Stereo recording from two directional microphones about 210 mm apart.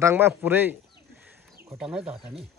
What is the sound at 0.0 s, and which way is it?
Bird, 10° right (ahead or behind).